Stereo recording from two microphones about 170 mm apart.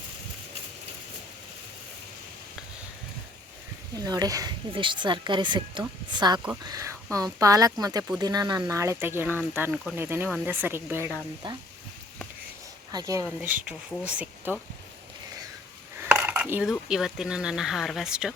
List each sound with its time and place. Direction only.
3.9 s speech: 20° right (ahead or behind)
11.4 s speech: 30° right (ahead or behind)
12.9 s speech: 20° right (ahead or behind)
14.0 s speech: 5° right (ahead or behind)
16.0 s dishes: 10° right (ahead or behind)
16.9 s speech: 5° right (ahead or behind)